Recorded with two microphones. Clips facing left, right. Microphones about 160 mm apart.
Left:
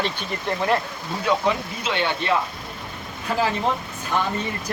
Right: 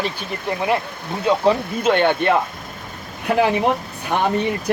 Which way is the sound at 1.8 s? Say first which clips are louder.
Right 8 dB; 50° right (ahead or behind).